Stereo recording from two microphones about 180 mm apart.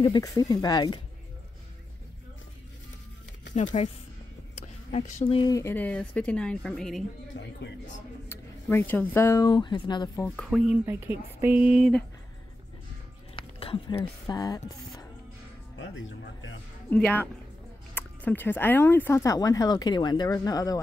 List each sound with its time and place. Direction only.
0.0 s speech: 20° left (ahead or behind)
3.8 s speech: 35° left (ahead or behind)
4.6 s a sound: 40° left (ahead or behind)
5.4 s speech: 15° left (ahead or behind); by 7.1 s centre (ahead or behind)
7.3 s speech: 90° left
8.3 s speech: 10° left (ahead or behind)
10.3 s speech: centre (ahead or behind)
13.4 s speech: 30° left (ahead or behind)
15.8 s speech: 90° left
16.9 s speech: 10° left (ahead or behind)